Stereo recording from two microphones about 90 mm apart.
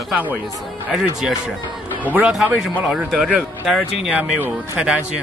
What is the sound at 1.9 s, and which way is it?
Music, 20° right (ahead or behind).